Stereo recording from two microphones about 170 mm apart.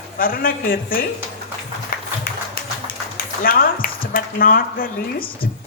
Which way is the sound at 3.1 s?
60° left (ahead or behind).